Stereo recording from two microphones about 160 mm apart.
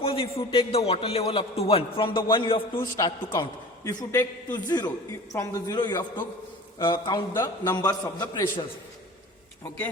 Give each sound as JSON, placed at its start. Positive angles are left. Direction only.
{"t": 0.0, "sound": "a man's voice", "side_deg": 35}
{"t": 2.7, "sound": "a man's voice", "side_deg": 20}